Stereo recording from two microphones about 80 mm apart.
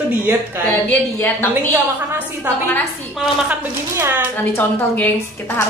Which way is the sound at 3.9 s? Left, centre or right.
Right.